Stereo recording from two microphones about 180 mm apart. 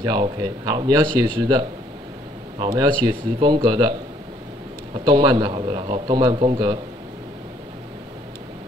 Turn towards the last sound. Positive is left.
turn(degrees=-25)  # may be behind; listen again after turning